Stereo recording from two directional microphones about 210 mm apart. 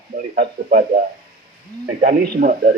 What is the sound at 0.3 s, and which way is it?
Speech, 40° right (ahead or behind).